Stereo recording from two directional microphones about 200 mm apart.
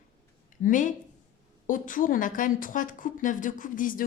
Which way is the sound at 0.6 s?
40° left (ahead or behind).